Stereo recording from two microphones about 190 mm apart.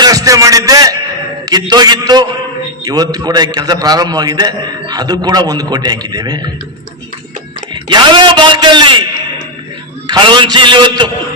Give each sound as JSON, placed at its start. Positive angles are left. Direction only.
{"t": 0.0, "sound": "music", "side_deg": -20}
{"t": 1.7, "sound": "a man's voice", "side_deg": -20}
{"t": 7.7, "sound": "a man's voice", "side_deg": -25}
{"t": 10.1, "sound": "a man's voice", "side_deg": -25}